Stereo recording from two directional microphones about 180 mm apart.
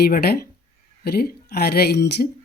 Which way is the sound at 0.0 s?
60° left (ahead or behind).